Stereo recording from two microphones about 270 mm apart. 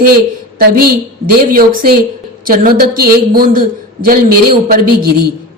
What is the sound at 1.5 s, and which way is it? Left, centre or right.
A woman's voice, right.